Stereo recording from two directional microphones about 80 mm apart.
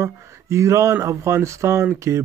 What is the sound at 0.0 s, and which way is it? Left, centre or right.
Speech, right.